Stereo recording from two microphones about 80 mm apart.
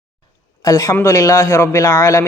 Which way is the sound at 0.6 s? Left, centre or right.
Left.